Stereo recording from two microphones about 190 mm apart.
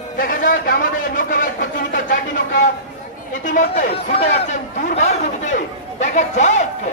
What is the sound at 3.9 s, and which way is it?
Speech, 35° left (ahead or behind).